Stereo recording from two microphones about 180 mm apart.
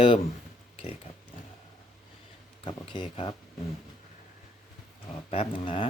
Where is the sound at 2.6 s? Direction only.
25° left (ahead or behind).